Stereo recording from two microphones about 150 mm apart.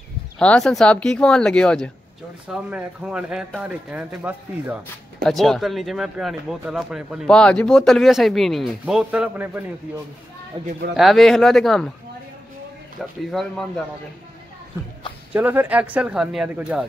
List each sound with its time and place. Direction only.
0.4 s speech: 5° left (ahead or behind)
2.4 s speech: 5° right (ahead or behind)
5.2 s speech: centre (ahead or behind)
7.2 s speech: 5° left (ahead or behind); by 9.7 s 10° right (ahead or behind)
10.5 s speech: 35° right (ahead or behind)
11.0 s speech: centre (ahead or behind)
13.3 s speech: centre (ahead or behind)
15.3 s speech: 15° right (ahead or behind)